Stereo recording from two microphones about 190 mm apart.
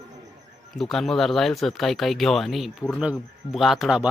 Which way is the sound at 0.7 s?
Centre (ahead or behind).